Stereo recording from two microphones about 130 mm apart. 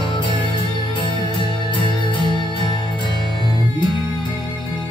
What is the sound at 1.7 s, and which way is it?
Music, 40° left (ahead or behind).